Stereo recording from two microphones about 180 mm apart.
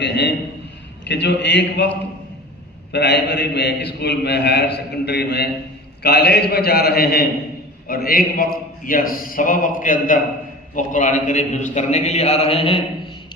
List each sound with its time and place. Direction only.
0.0 s a man's voice: 80° left
2.9 s a man's voice: 70° left (ahead or behind); by 12.8 s 30° left (ahead or behind)